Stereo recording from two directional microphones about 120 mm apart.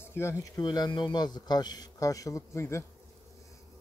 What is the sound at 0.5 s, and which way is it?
A man's voice, 35° left (ahead or behind).